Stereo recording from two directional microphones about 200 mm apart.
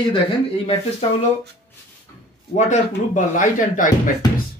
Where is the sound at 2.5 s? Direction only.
40° left (ahead or behind).